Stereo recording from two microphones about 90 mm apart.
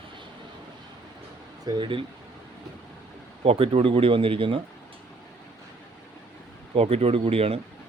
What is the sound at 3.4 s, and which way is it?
Speech, 90° right.